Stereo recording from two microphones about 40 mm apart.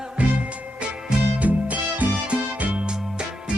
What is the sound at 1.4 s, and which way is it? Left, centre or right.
Music, right.